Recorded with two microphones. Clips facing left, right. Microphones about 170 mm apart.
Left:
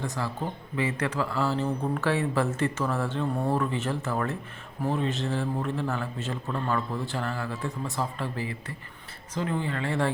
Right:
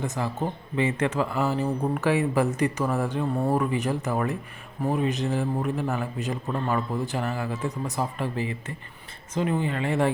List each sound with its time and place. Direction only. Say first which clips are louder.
0.0 s speech: right 3 dB; 20° right (ahead or behind)